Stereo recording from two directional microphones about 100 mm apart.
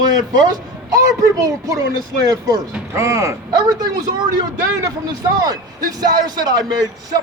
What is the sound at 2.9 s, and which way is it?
Speech, 30° right (ahead or behind).